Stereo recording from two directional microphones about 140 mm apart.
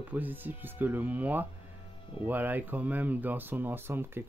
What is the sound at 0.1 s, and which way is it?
Speech, 10° right (ahead or behind).